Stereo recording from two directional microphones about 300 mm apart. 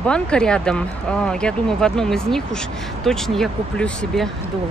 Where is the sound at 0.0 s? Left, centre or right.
Centre.